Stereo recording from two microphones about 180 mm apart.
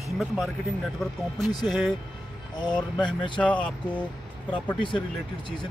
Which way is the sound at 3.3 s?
5° left (ahead or behind).